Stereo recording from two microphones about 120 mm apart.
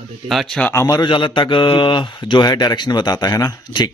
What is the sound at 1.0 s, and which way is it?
Speech, 40° left (ahead or behind).